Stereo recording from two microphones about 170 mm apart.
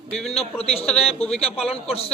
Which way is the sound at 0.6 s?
35° left (ahead or behind).